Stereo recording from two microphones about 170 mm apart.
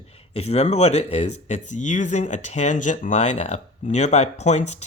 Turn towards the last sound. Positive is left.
turn(degrees=40)  # may be behind; listen again after turning